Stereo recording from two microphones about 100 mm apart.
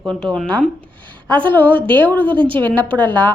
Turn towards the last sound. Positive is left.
turn(degrees=15)  # may be behind; listen again after turning